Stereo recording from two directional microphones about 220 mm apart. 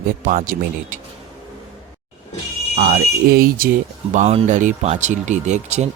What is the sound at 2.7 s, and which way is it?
Speech, 35° right (ahead or behind).